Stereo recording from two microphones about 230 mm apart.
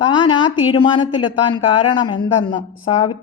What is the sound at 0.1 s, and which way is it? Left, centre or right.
Speech, centre.